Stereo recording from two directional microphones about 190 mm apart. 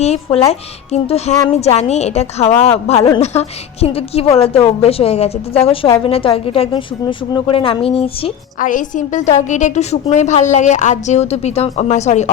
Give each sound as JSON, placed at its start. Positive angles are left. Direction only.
{"t": 0.0, "sound": "a woman's voice", "side_deg": 35}
{"t": 8.5, "sound": "a woman's voice", "side_deg": 45}